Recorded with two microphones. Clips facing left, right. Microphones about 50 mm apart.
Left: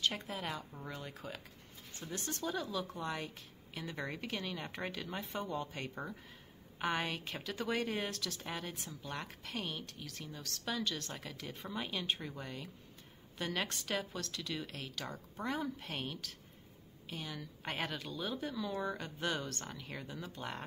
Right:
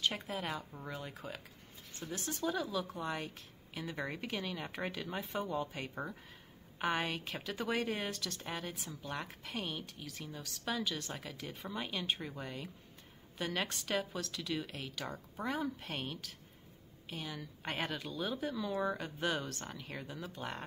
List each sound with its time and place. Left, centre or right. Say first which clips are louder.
0.0 s speech: right 1 dB; centre